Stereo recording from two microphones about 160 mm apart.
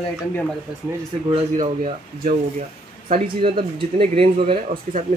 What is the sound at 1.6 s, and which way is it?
Speech, 50° right (ahead or behind).